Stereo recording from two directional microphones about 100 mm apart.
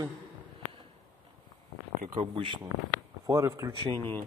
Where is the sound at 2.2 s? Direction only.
60° right (ahead or behind).